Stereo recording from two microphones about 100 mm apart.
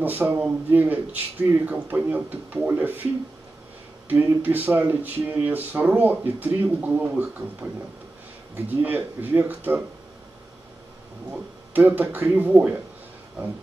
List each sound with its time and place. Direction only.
0.0 s speech: 20° right (ahead or behind)
4.1 s speech: 20° right (ahead or behind)
8.8 s speech: 20° right (ahead or behind)
11.3 s speech: 20° right (ahead or behind)